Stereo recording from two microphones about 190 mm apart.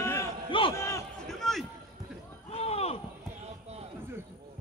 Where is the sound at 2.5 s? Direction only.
35° left (ahead or behind).